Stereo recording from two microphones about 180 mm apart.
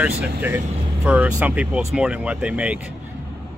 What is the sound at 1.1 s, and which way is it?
A man's voice, 10° right (ahead or behind).